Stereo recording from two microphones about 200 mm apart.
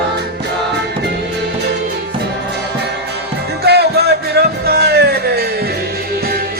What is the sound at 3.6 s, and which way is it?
Music, 55° right (ahead or behind).